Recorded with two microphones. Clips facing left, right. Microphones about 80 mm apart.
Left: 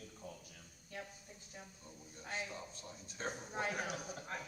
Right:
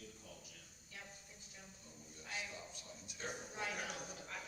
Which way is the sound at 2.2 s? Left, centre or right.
Left.